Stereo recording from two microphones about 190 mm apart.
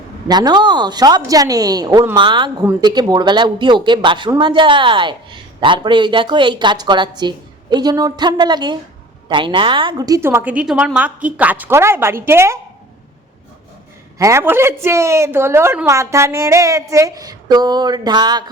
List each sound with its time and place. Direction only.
0.3 s a woman's voice: 20° right (ahead or behind)
14.2 s a woman's voice: 15° right (ahead or behind)